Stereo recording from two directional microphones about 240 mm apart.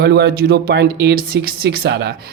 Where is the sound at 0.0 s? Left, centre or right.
Right.